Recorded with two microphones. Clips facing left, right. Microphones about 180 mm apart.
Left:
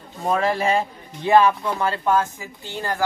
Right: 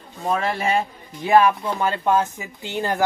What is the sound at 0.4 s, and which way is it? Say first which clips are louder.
Speech: left 5 dB; 35° left (ahead or behind).